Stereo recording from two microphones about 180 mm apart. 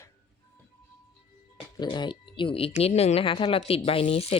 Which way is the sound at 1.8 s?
25° left (ahead or behind).